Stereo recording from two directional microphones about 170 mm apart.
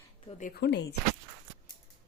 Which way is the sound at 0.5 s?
85° left.